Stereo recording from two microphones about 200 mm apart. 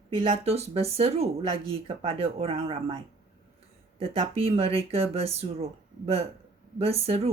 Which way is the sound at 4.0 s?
30° right (ahead or behind).